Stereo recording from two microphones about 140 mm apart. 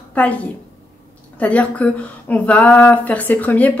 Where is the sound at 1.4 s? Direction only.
10° left (ahead or behind).